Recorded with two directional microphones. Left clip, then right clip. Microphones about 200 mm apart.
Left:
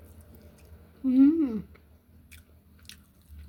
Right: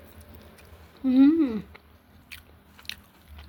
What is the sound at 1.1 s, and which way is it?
Speech, 25° left (ahead or behind).